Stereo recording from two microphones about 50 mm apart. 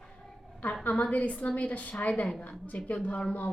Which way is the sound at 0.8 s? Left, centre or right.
Left.